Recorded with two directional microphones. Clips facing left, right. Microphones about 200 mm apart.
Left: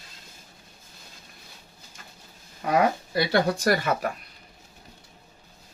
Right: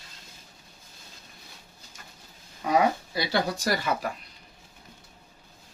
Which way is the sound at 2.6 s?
55° left (ahead or behind).